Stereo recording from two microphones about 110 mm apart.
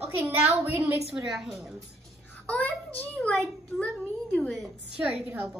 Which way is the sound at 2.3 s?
15° left (ahead or behind).